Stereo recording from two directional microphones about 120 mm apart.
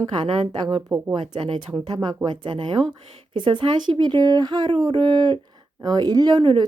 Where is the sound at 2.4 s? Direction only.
40° right (ahead or behind).